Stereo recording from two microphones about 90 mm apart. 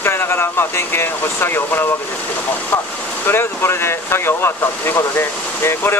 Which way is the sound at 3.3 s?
25° left (ahead or behind).